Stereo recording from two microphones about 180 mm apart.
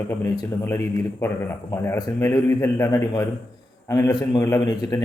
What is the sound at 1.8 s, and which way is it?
A man's voice, 15° left (ahead or behind).